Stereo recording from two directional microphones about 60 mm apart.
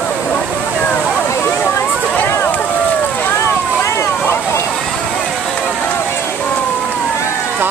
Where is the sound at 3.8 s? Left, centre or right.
Left.